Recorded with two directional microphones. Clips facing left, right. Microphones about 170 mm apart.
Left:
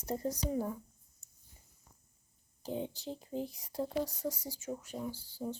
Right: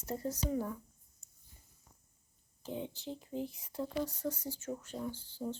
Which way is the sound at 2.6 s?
35° left (ahead or behind).